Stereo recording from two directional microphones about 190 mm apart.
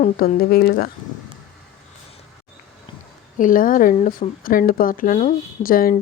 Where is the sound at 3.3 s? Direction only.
45° left (ahead or behind).